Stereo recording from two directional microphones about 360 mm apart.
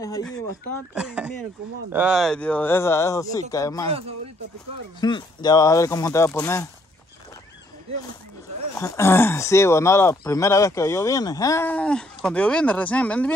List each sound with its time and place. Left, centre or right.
0.0 s speech: centre
0.9 s speech: centre
5.0 s speech: centre
8.7 s speech: centre